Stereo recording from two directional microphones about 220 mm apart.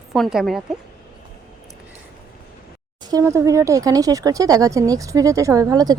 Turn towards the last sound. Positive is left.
turn(degrees=-15)  # may be behind; listen again after turning